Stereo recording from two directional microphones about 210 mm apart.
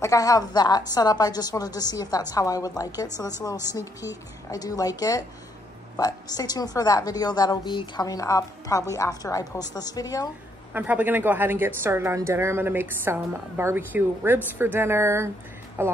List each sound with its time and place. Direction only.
0.0 s a woman's voice: 15° left (ahead or behind)
10.7 s a woman's voice: 10° right (ahead or behind)